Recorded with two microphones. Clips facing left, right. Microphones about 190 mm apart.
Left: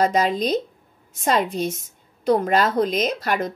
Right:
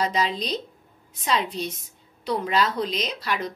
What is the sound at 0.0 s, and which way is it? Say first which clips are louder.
A woman's voice: left 6 dB; 50° left (ahead or behind).